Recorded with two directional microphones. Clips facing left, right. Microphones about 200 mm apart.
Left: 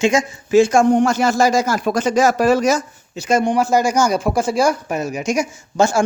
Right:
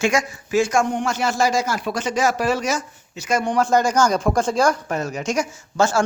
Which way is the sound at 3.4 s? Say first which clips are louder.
Even; 10° left (ahead or behind).